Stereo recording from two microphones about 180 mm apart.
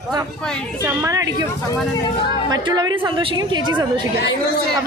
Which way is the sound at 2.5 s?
25° right (ahead or behind).